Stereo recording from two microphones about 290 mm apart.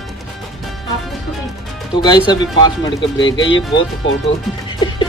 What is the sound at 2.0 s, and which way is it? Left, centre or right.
Speech, centre.